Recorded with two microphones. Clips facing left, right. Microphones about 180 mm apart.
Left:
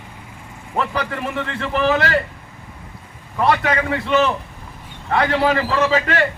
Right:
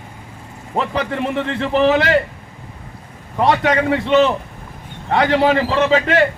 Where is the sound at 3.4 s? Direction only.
30° right (ahead or behind).